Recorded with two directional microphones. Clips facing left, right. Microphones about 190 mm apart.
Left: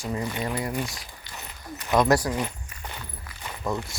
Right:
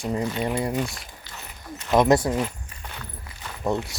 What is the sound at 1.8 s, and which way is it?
Speech, 20° right (ahead or behind).